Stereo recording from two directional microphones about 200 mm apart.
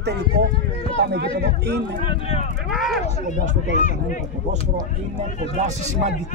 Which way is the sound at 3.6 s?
40° left (ahead or behind).